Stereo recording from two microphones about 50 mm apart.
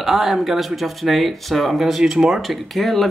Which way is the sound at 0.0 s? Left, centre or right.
Centre.